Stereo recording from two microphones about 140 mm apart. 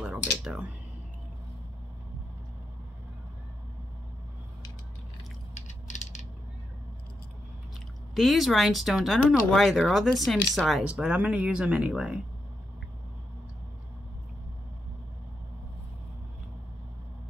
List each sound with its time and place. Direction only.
0.0 s a sound: 5° right (ahead or behind)
5.7 s mechanisms: 55° left (ahead or behind)
8.1 s speech: centre (ahead or behind)